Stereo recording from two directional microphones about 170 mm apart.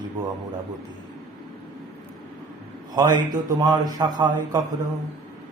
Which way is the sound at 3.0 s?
25° right (ahead or behind).